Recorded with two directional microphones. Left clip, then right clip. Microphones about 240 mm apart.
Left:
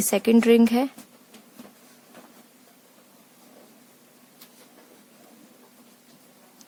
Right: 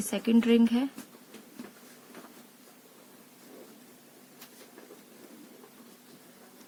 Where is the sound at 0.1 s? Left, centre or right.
Left.